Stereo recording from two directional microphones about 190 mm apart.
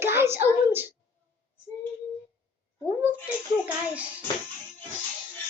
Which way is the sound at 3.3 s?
10° right (ahead or behind).